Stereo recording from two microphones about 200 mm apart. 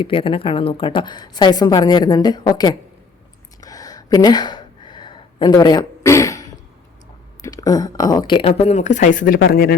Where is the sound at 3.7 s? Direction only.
20° left (ahead or behind).